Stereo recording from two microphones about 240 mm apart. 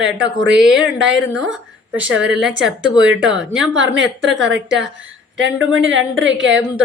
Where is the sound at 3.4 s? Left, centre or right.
Centre.